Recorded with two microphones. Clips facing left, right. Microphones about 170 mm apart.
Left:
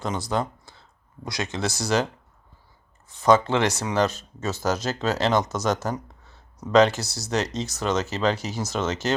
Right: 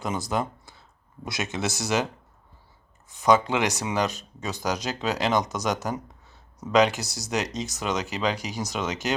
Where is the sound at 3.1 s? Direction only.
15° right (ahead or behind).